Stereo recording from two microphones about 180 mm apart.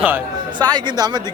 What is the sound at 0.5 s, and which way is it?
Speech, 20° right (ahead or behind).